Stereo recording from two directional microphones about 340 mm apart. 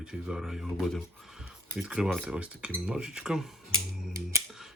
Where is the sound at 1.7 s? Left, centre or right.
Centre.